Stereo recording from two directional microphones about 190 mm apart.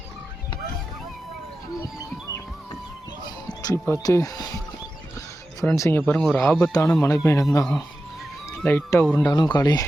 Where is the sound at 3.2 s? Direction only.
20° left (ahead or behind).